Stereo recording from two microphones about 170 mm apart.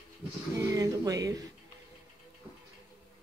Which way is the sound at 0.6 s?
20° right (ahead or behind).